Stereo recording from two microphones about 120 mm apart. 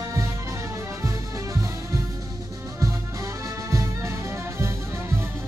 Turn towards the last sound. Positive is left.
turn(degrees=-20)  # may be behind; listen again after turning